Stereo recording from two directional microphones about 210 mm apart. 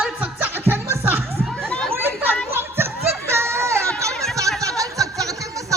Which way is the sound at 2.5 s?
10° right (ahead or behind).